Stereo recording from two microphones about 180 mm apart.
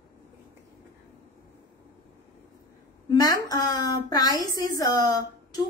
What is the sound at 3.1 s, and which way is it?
A woman's voice, 20° left (ahead or behind).